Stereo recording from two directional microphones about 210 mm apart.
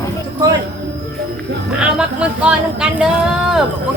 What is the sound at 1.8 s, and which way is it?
Speech, 5° right (ahead or behind).